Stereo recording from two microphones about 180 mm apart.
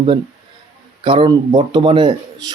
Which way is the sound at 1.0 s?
30° right (ahead or behind).